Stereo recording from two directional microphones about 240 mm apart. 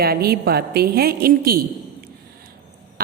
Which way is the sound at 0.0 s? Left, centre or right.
Right.